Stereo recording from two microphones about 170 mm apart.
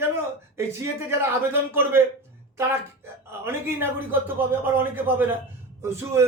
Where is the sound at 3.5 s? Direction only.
15° right (ahead or behind).